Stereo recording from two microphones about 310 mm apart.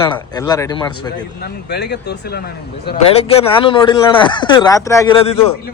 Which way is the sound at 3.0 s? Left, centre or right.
Centre.